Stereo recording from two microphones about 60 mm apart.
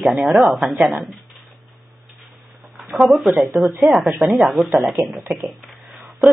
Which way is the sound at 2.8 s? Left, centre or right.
Right.